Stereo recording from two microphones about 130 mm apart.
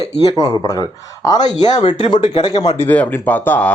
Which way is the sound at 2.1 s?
45° left (ahead or behind).